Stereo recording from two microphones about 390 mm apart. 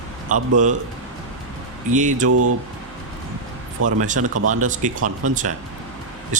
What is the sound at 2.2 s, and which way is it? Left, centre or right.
Speech, right.